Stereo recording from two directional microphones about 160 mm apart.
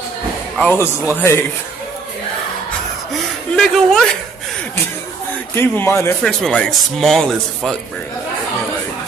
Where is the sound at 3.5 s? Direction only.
Centre (ahead or behind).